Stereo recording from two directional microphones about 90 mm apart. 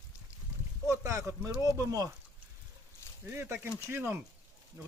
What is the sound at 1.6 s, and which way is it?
Speech, 40° right (ahead or behind).